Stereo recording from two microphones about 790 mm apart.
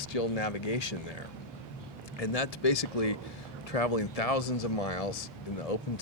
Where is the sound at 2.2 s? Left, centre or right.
Left.